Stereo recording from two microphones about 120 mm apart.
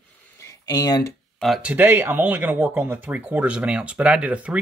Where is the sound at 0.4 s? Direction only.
30° left (ahead or behind).